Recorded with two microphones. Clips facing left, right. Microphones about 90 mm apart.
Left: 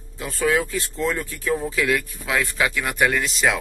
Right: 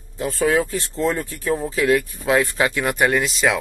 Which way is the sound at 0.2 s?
35° right (ahead or behind).